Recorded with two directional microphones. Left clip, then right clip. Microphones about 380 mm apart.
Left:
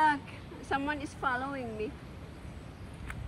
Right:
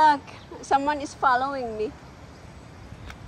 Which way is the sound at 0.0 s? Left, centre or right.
Centre.